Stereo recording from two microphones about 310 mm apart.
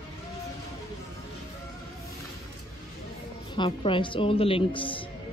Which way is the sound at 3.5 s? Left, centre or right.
Centre.